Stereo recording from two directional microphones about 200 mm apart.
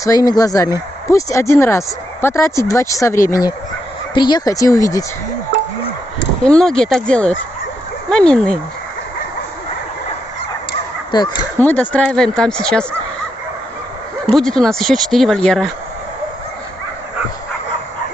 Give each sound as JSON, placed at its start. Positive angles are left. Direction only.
{"t": 0.0, "sound": "speech", "side_deg": 15}
{"t": 6.5, "sound": "speech", "side_deg": 5}
{"t": 11.1, "sound": "speech", "side_deg": 25}
{"t": 11.6, "sound": "speech", "side_deg": 10}
{"t": 14.3, "sound": "speech", "side_deg": 0}